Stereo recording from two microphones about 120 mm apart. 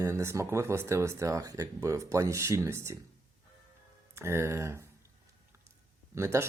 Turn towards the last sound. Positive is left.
turn(degrees=-25)  # may be behind; listen again after turning